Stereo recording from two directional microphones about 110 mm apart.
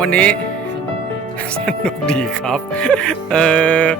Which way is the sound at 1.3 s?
10° left (ahead or behind).